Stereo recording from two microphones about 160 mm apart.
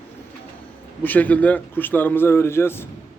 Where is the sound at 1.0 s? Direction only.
10° left (ahead or behind).